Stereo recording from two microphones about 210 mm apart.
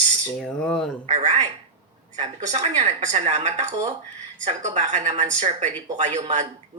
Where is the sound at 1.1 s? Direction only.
30° right (ahead or behind).